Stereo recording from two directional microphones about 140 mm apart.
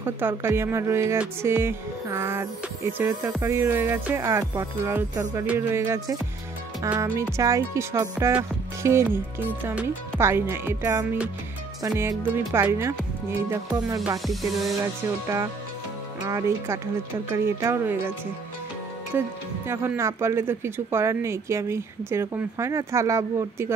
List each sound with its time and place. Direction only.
0.0 s music: 15° right (ahead or behind)
6.8 s speech: 25° right (ahead or behind)
9.6 s music: 15° right (ahead or behind)
14.2 s music: centre (ahead or behind)
14.8 s speech: 20° right (ahead or behind)
19.1 s music: 15° right (ahead or behind)
20.0 s speech: 20° right (ahead or behind)